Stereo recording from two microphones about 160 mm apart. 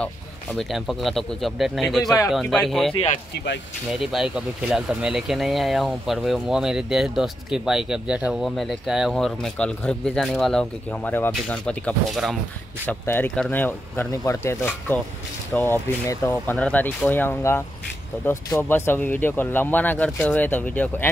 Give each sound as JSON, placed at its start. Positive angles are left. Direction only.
{"t": 0.0, "sound": "speech", "side_deg": 5}
{"t": 3.3, "sound": "speech", "side_deg": 90}
{"t": 4.0, "sound": "speech", "side_deg": -5}
{"t": 12.8, "sound": "speech", "side_deg": 10}